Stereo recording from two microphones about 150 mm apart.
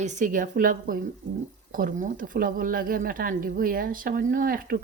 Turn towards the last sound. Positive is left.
turn(degrees=-70)  # may be behind; listen again after turning